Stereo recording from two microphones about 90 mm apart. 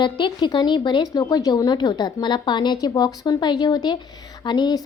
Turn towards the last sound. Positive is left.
turn(degrees=55)  # may be behind; listen again after turning